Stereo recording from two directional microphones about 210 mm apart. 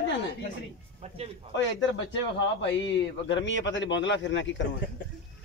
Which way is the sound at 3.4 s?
60° left (ahead or behind).